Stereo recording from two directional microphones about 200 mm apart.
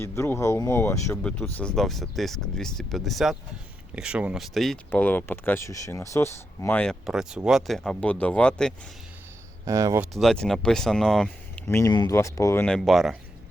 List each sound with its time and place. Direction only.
0.0 s speech: 15° left (ahead or behind)
9.6 s speech: 15° right (ahead or behind)
10.2 s speech: centre (ahead or behind)
12.6 s speech: centre (ahead or behind)